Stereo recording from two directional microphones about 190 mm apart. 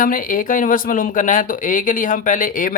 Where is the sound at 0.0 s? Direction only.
45° left (ahead or behind).